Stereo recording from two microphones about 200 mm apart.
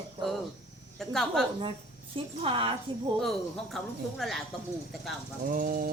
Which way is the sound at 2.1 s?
25° right (ahead or behind).